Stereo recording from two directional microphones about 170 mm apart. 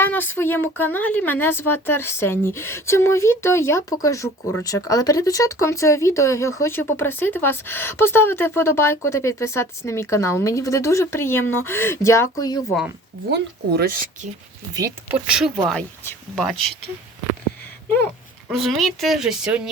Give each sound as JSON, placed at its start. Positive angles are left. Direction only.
{"t": 0.0, "sound": "speech", "side_deg": 10}
{"t": 13.3, "sound": "speech", "side_deg": -75}
{"t": 15.3, "sound": "speech", "side_deg": -5}
{"t": 18.4, "sound": "speech", "side_deg": 0}